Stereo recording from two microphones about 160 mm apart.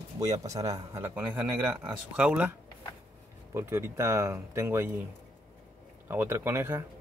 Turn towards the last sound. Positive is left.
turn(degrees=-15)  # may be behind; listen again after turning